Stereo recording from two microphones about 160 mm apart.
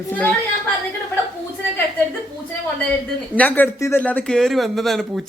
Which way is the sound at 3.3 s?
10° left (ahead or behind).